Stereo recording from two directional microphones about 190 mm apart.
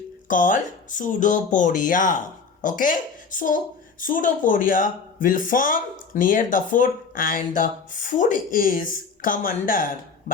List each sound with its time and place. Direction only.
0.3 s speech: 45° left (ahead or behind)